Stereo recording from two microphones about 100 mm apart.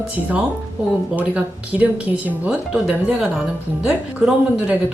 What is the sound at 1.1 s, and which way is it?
Speech, 15° right (ahead or behind).